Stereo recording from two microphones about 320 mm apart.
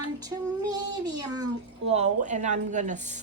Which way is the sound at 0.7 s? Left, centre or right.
Centre.